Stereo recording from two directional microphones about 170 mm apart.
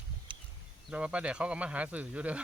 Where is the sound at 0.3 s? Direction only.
30° right (ahead or behind).